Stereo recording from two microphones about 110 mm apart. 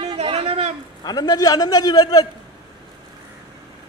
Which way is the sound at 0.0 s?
65° right (ahead or behind).